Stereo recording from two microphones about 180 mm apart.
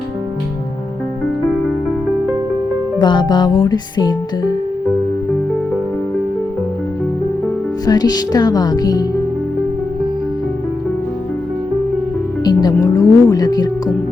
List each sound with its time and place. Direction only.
3.0 s speech: 25° left (ahead or behind)
7.9 s speech: 20° left (ahead or behind)
12.6 s speech: 20° left (ahead or behind)